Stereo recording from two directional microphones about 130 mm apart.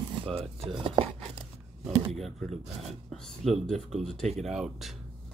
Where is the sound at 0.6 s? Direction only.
45° right (ahead or behind).